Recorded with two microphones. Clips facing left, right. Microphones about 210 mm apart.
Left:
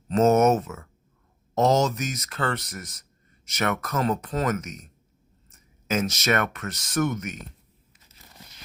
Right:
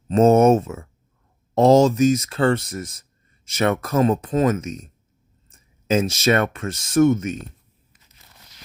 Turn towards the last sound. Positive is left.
turn(degrees=-25)  # may be behind; listen again after turning